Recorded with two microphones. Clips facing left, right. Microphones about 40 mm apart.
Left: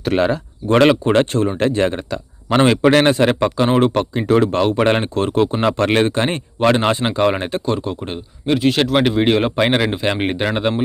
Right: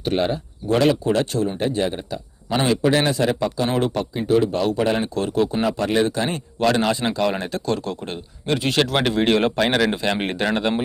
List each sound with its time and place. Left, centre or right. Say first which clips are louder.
0.7 s a man's voice: left 5 dB; left
1.0 s speech: left 5 dB; left
1.5 s speech: left 5 dB; left
2.6 s a man's voice: left 6 dB; left
3.7 s speech: left 8 dB; left
3.9 s speech: left 4 dB; left
4.8 s a man's voice: left 5 dB; left
5.0 s speech: left 4 dB; left
5.6 s a man's voice: left 4 dB; left
6.1 s speech: left 4 dB; left
6.6 s speech: left 4 dB; left
7.6 s speech: left 3 dB; centre
8.4 s speech: left 4 dB; centre
9.6 s speech: left 3 dB; left